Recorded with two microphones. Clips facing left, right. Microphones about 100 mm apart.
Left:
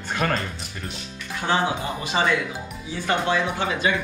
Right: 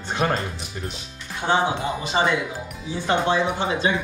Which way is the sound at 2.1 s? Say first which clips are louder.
Even; 15° right (ahead or behind).